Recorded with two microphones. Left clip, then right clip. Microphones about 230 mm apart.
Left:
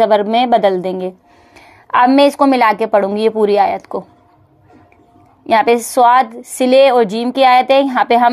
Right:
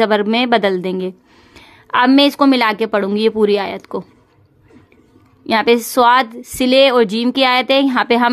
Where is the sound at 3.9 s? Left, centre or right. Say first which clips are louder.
Left 2 dB; right.